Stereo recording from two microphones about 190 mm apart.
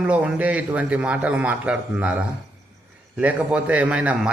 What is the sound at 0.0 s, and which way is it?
A man's voice, 5° right (ahead or behind).